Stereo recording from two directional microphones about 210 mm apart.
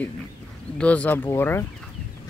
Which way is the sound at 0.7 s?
5° left (ahead or behind).